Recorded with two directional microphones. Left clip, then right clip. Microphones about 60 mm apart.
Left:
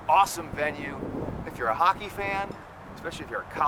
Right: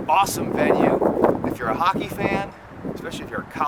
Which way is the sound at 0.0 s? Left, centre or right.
Right.